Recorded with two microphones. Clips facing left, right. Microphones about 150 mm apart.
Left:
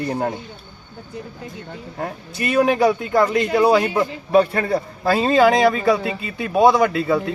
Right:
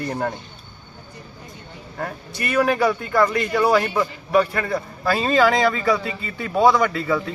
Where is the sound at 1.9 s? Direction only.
20° left (ahead or behind).